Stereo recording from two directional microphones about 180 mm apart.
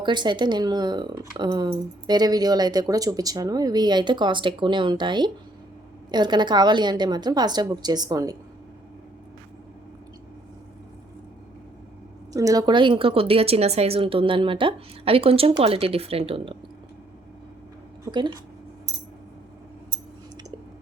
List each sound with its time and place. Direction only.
0.0 s speech: 25° right (ahead or behind)
12.3 s a woman's voice: 20° right (ahead or behind)
18.0 s a sound: 25° right (ahead or behind)